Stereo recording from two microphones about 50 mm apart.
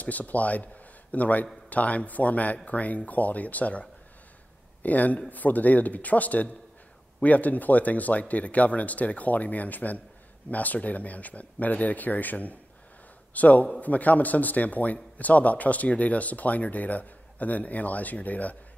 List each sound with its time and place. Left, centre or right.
0.0 s speech: left